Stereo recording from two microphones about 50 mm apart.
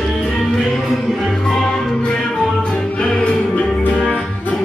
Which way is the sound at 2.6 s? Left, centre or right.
Centre.